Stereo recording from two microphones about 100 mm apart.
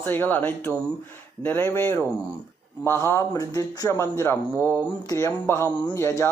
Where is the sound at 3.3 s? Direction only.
40° left (ahead or behind).